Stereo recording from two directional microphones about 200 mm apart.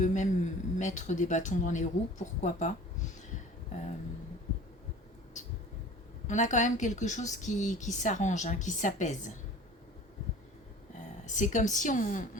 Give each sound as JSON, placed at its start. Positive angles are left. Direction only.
{"t": 0.0, "sound": "speech", "side_deg": 40}
{"t": 6.2, "sound": "speech", "side_deg": 35}
{"t": 11.3, "sound": "speech", "side_deg": 40}